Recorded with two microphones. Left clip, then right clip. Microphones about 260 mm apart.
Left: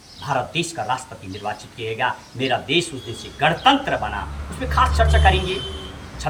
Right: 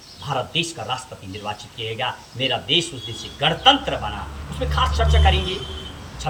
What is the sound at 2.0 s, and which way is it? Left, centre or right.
A man's voice, centre.